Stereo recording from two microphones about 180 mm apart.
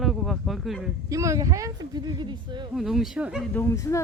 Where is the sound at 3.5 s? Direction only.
15° left (ahead or behind).